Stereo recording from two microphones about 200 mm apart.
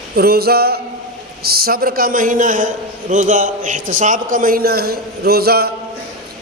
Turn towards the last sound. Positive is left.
turn(degrees=-50)  # may be behind; listen again after turning